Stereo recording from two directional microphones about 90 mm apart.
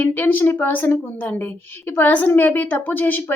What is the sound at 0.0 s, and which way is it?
A woman's voice, 20° left (ahead or behind).